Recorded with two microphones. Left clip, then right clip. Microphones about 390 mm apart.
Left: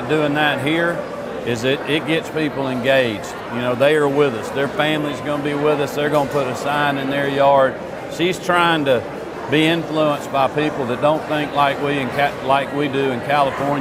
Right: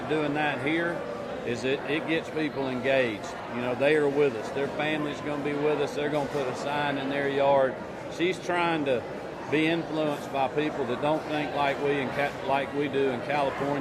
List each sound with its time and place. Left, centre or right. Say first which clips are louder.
0.1 s speech: left 10 dB; left
5.5 s speech: left 8 dB; left